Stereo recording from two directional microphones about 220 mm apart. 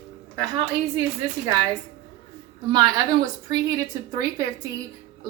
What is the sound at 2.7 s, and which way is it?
A woman's voice, 20° right (ahead or behind).